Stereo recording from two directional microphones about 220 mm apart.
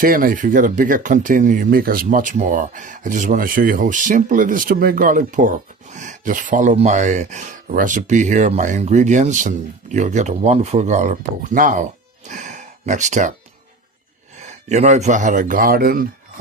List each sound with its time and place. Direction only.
0.0 s speech: 40° right (ahead or behind)
14.3 s speech: 30° right (ahead or behind)